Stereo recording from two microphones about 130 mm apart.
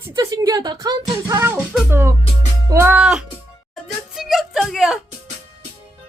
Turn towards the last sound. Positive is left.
turn(degrees=0)  # may be behind; listen again after turning